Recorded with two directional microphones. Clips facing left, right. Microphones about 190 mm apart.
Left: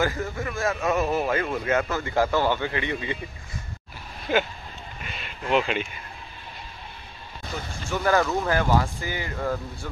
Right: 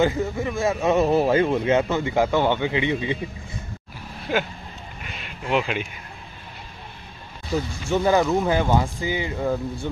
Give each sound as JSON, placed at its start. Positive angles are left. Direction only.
{"t": 0.0, "sound": "a man's voice", "side_deg": -20}
{"t": 5.0, "sound": "quack", "side_deg": -10}
{"t": 7.9, "sound": "speech", "side_deg": -20}